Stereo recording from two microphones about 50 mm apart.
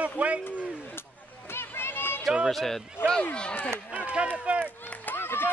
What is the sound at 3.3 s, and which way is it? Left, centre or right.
Speech, left.